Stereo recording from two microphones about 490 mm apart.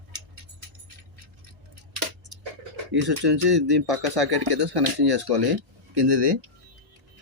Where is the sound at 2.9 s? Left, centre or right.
Right.